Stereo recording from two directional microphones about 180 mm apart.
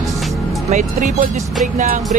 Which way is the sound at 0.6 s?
45° right (ahead or behind).